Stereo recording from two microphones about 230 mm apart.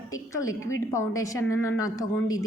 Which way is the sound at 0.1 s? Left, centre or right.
Centre.